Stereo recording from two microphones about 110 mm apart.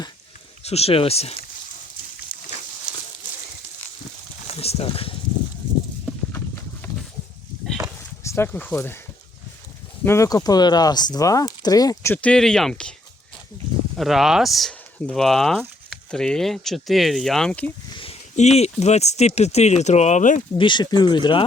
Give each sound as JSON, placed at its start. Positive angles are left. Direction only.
{"t": 0.6, "sound": "speech", "side_deg": 70}
{"t": 4.4, "sound": "a sound", "side_deg": 65}
{"t": 8.2, "sound": "speech", "side_deg": 25}
{"t": 10.0, "sound": "speech", "side_deg": 20}
{"t": 10.2, "sound": "speech", "side_deg": 35}
{"t": 12.1, "sound": "speech", "side_deg": 10}
{"t": 13.9, "sound": "speech", "side_deg": 0}
{"t": 17.9, "sound": "a sound", "side_deg": 55}
{"t": 18.3, "sound": "speech", "side_deg": 80}
{"t": 20.6, "sound": "speech", "side_deg": 45}